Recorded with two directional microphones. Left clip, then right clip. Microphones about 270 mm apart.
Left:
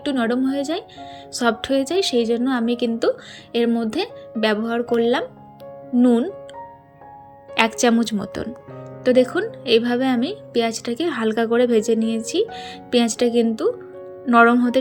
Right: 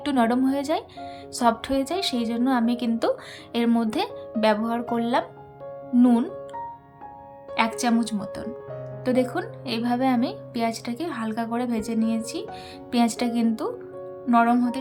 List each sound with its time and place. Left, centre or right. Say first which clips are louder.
0.0 s a woman's voice: left 1 dB; centre
7.5 s a woman's voice: left 6 dB; centre